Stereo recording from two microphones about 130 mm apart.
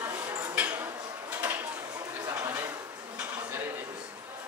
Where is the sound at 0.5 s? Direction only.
15° right (ahead or behind).